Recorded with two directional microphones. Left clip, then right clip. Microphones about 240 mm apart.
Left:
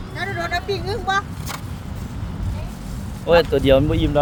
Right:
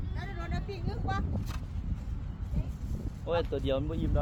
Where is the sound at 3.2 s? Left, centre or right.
Centre.